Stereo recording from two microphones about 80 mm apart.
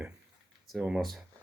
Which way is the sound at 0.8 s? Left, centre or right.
Centre.